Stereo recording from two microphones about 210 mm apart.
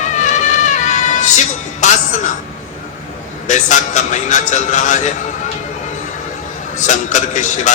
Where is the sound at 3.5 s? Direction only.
35° left (ahead or behind).